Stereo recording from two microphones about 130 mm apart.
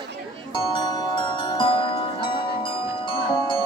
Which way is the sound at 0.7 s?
35° left (ahead or behind).